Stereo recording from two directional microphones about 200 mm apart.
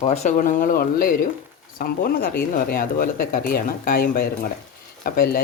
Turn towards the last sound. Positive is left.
turn(degrees=45)  # may be behind; listen again after turning